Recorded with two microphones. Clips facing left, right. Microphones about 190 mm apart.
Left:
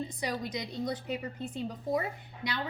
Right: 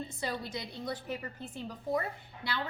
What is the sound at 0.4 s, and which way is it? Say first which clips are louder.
A woman's voice: left 4 dB; 20° left (ahead or behind).